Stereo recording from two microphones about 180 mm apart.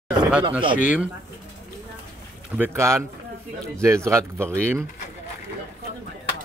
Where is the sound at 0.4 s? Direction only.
30° right (ahead or behind).